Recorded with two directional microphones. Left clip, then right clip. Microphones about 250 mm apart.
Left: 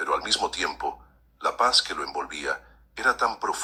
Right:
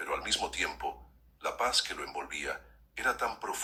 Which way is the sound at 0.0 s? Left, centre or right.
Centre.